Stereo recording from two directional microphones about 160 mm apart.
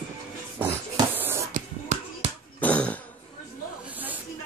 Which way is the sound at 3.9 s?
10° right (ahead or behind).